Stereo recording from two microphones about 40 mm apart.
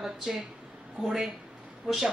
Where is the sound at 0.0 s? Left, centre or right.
Centre.